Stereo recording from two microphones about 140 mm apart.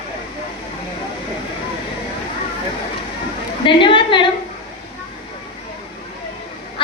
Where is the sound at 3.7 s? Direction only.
35° left (ahead or behind).